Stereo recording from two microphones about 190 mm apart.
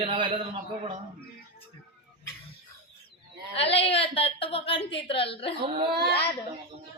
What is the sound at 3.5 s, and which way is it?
A woman's voice, 30° left (ahead or behind).